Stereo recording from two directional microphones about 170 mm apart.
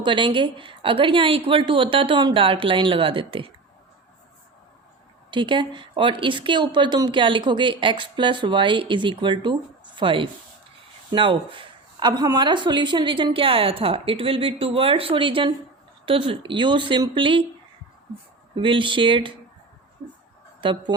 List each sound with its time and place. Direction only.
0.0 s speech: 30° right (ahead or behind)
5.3 s speech: 30° right (ahead or behind)
18.5 s speech: 30° right (ahead or behind)
20.6 s speech: 30° right (ahead or behind)